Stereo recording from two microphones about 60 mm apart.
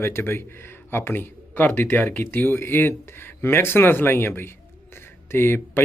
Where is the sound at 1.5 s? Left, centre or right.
Left.